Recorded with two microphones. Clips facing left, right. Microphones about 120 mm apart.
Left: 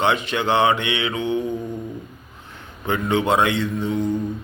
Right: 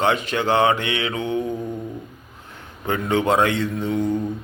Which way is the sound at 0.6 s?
40° right (ahead or behind).